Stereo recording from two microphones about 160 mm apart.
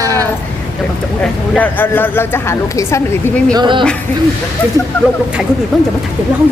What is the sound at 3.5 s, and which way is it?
Speech, 30° right (ahead or behind).